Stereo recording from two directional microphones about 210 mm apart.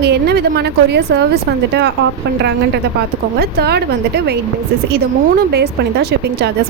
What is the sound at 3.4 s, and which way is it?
Speech, 50° right (ahead or behind).